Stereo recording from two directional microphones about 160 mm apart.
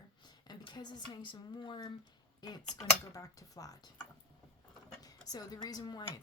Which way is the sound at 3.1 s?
20° left (ahead or behind).